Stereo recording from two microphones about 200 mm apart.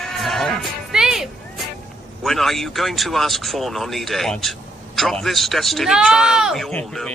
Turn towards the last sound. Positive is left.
turn(degrees=5)  # may be behind; listen again after turning